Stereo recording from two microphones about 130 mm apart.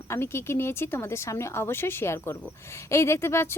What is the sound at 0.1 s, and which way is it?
Speech, 20° left (ahead or behind).